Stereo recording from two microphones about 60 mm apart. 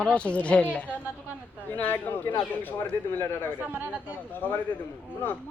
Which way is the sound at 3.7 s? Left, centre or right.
Right.